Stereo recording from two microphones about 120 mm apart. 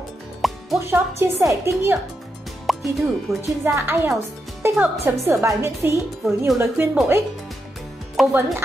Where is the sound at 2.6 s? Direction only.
Centre (ahead or behind).